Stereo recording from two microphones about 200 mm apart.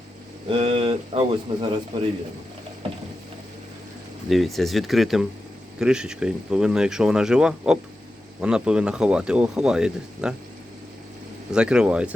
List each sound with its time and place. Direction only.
0.5 s speech: 25° right (ahead or behind)
4.3 s speech: centre (ahead or behind)
11.5 s speech: 5° right (ahead or behind)